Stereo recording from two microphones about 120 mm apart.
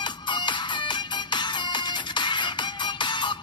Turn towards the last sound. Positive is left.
turn(degrees=40)  # may be behind; listen again after turning